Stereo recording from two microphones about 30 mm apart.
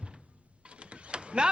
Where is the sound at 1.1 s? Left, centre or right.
Right.